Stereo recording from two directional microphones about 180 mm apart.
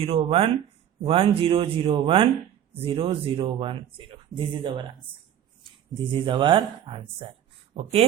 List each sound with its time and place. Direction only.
0.0 s speech: 30° right (ahead or behind)
6.0 s speech: 25° right (ahead or behind)